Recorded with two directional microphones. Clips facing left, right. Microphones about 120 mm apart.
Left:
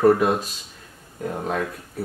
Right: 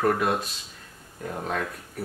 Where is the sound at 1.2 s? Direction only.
15° left (ahead or behind).